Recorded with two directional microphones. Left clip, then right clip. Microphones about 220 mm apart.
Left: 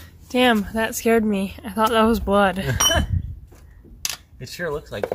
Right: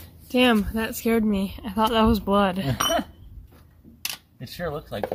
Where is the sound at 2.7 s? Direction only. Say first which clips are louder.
Left 5 dB; 20° left (ahead or behind).